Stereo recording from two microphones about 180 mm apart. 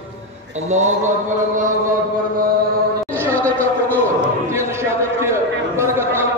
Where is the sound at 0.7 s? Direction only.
40° right (ahead or behind).